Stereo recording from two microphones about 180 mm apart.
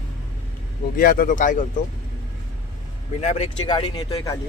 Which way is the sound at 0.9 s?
55° left (ahead or behind).